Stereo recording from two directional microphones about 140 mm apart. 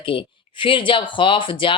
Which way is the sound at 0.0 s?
35° left (ahead or behind).